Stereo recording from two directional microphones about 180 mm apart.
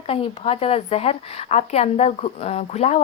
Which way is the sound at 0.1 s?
30° left (ahead or behind).